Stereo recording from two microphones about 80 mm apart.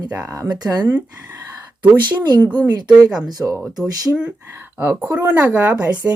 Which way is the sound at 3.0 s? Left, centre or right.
Centre.